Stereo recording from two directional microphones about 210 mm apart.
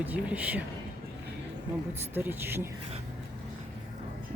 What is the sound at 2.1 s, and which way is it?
Speech, 10° right (ahead or behind).